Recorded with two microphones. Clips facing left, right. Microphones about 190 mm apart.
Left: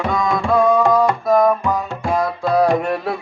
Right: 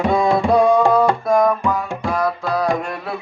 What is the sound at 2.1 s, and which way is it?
Music, 25° left (ahead or behind).